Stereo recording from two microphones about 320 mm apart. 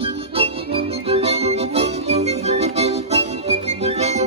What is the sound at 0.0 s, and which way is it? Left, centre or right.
Music, centre.